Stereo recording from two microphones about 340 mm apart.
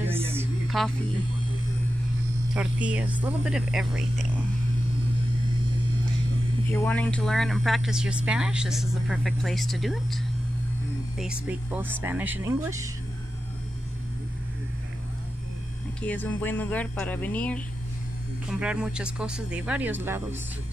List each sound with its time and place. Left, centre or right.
0.0 s music: centre
2.5 s speech: centre
6.7 s speech: centre
16.0 s speech: centre